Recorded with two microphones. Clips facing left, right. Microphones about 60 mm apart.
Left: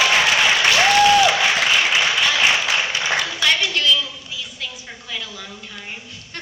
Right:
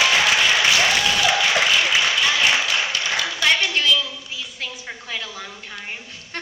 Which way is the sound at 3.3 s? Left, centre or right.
Right.